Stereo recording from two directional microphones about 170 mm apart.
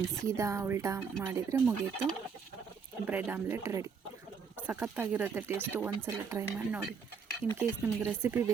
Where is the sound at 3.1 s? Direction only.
10° right (ahead or behind).